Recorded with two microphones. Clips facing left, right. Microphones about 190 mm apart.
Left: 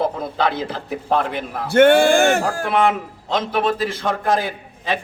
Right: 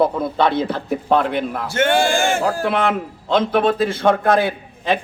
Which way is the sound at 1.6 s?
60° left (ahead or behind).